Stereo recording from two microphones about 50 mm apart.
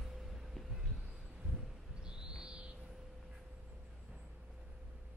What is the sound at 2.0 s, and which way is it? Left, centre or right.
Bird, centre.